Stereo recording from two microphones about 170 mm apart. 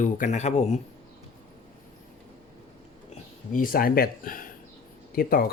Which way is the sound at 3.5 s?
55° left (ahead or behind).